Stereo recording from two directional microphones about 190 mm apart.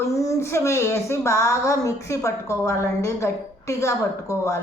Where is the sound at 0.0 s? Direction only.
15° left (ahead or behind).